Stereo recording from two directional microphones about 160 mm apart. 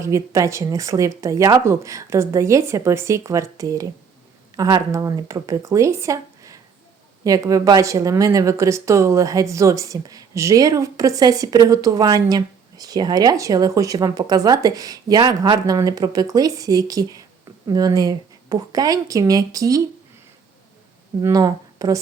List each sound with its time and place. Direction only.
0.0 s speech: 20° right (ahead or behind)
21.2 s speech: 25° right (ahead or behind)